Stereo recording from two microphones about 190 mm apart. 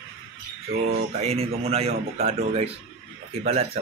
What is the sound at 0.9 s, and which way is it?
Speech, 35° right (ahead or behind).